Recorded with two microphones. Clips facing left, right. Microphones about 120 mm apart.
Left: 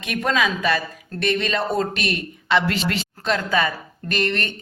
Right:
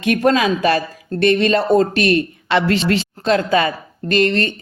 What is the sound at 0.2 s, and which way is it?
Speech, 35° right (ahead or behind).